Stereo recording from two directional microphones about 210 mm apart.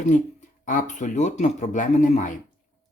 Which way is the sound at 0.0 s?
35° left (ahead or behind).